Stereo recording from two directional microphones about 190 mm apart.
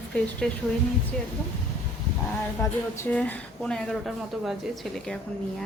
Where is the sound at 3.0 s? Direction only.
10° left (ahead or behind).